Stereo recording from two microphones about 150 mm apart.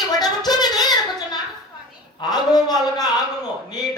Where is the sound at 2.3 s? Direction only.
25° left (ahead or behind).